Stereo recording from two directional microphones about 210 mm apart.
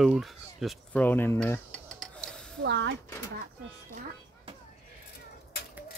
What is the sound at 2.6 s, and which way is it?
Speech, 60° right (ahead or behind).